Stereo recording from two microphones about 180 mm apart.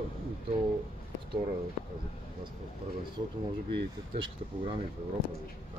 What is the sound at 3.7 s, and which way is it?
Speech, 30° right (ahead or behind).